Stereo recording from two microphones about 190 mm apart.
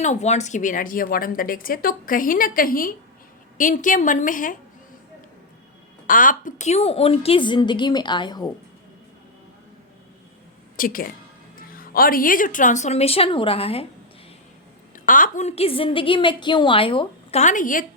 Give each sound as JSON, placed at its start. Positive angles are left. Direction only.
{"t": 0.0, "sound": "a woman's voice", "side_deg": 35}
{"t": 6.1, "sound": "a woman's voice", "side_deg": 45}
{"t": 10.8, "sound": "a woman's voice", "side_deg": 50}
{"t": 14.9, "sound": "a woman's voice", "side_deg": 45}
{"t": 17.4, "sound": "a woman's voice", "side_deg": 45}